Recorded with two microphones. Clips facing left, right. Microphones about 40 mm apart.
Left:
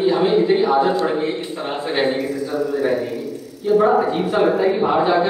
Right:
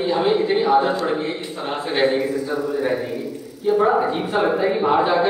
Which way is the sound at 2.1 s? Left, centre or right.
Centre.